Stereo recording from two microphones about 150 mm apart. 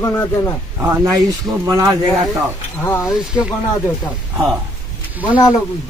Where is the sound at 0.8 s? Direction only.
15° right (ahead or behind).